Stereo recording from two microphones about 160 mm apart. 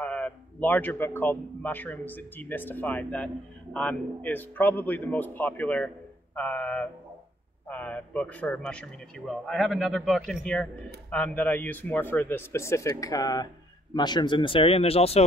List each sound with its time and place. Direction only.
0.0 s a man's voice: 10° left (ahead or behind); by 15.2 s 40° left (ahead or behind)